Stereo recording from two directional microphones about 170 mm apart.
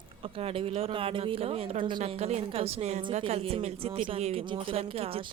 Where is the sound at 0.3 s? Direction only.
35° right (ahead or behind).